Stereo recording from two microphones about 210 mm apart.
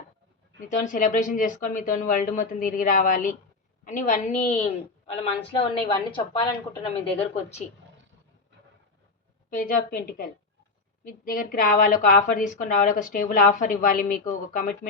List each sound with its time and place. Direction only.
0.7 s a woman's voice: 35° left (ahead or behind)
9.5 s a woman's voice: 40° left (ahead or behind)